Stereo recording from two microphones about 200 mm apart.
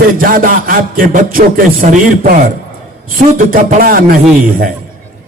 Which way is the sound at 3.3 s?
45° right (ahead or behind).